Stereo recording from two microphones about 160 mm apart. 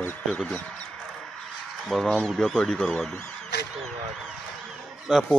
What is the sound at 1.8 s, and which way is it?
Speech, centre (ahead or behind).